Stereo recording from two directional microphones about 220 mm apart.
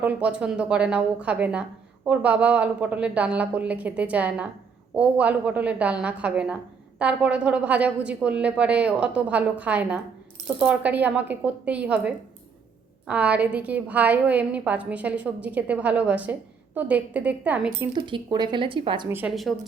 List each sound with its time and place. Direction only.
0.0 s a woman's voice: 5° right (ahead or behind)
17.9 s speech: 20° right (ahead or behind)
19.0 s a woman's voice: 10° right (ahead or behind)